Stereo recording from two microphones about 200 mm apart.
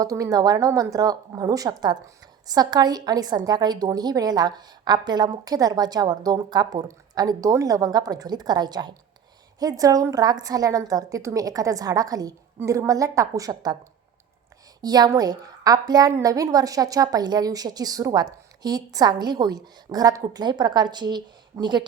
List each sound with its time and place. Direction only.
0.0 s a woman's voice: 15° right (ahead or behind)
14.8 s a woman's voice: 20° right (ahead or behind)